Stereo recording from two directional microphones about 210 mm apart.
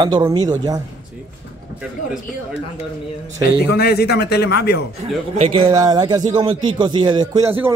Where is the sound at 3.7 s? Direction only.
50° left (ahead or behind).